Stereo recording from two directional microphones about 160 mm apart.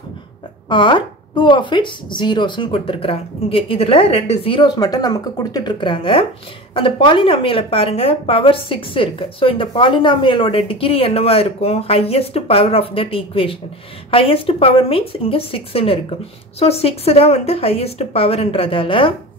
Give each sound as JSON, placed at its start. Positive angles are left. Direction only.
{"t": 0.7, "sound": "a woman's voice", "side_deg": 30}